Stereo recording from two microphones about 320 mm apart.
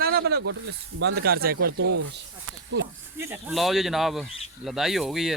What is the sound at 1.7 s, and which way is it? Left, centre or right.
Speech, right.